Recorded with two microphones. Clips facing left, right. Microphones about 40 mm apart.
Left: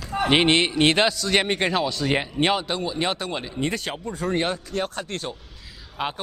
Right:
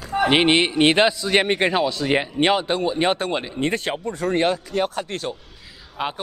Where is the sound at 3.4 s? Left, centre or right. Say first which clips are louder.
Right 3 dB; right.